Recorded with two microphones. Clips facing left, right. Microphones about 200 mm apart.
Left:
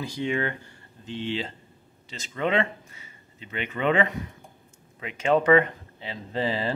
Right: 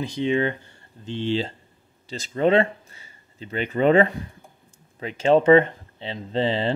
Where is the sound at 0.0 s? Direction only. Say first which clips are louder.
Right 5 dB; 20° right (ahead or behind).